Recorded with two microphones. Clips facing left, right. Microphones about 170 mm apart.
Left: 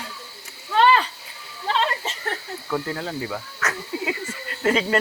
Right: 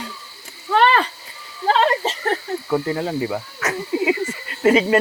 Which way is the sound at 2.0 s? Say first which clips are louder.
Right 8 dB; 35° right (ahead or behind).